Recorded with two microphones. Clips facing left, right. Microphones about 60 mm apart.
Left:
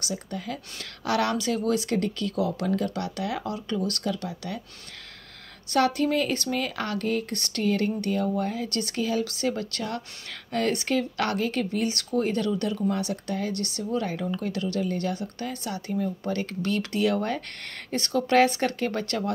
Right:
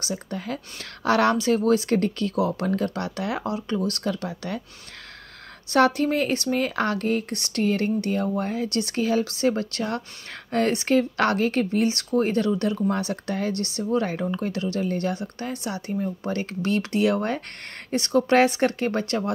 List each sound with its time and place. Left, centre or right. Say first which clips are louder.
0.0 s speech: right 2 dB; right
4.0 s speech: right 2 dB; right
5.7 s speech: right 3 dB; right
7.3 s speech: right 4 dB; centre
7.6 s speech: right 2 dB; right